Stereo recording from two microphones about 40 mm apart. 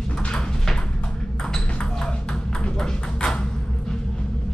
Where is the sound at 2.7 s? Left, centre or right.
Centre.